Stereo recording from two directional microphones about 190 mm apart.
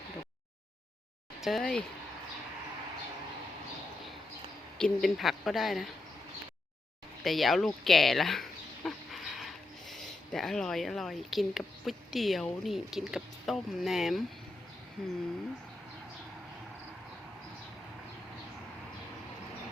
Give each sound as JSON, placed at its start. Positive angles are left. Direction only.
{"t": 1.5, "sound": "a woman's voice", "side_deg": 5}
{"t": 4.8, "sound": "a woman's voice", "side_deg": 0}
{"t": 7.3, "sound": "a woman's voice", "side_deg": 0}